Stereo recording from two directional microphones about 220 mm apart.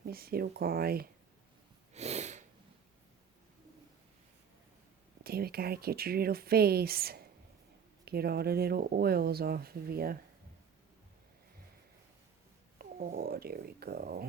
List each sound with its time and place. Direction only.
0.0 s speech: 45° right (ahead or behind)
1.9 s snort: 30° right (ahead or behind)
5.2 s speech: 45° right (ahead or behind)
12.8 s speech: 40° right (ahead or behind)